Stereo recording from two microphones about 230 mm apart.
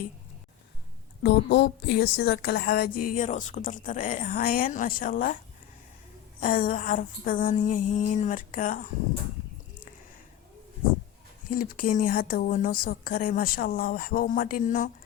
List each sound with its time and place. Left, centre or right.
1.2 s speech: left
6.4 s speech: left
11.4 s speech: left